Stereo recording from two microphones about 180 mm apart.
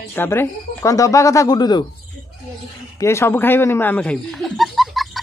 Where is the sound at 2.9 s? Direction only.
15° left (ahead or behind).